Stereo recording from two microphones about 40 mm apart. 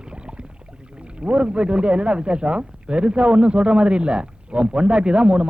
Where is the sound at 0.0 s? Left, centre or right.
Right.